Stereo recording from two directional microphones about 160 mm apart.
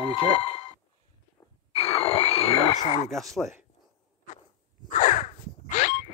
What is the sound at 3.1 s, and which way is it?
Speech, centre (ahead or behind).